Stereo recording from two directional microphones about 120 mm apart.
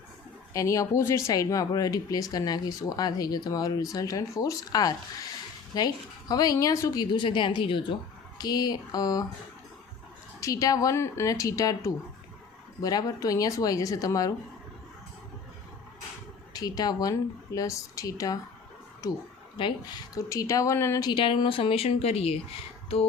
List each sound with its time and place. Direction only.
0.5 s speech: 25° left (ahead or behind)
10.4 s speech: 30° left (ahead or behind)
16.5 s speech: 30° left (ahead or behind)
19.6 s a woman's voice: 40° left (ahead or behind)
20.1 s speech: 25° left (ahead or behind)
21.1 s a woman's voice: 40° left (ahead or behind); by 22.4 s 60° left (ahead or behind)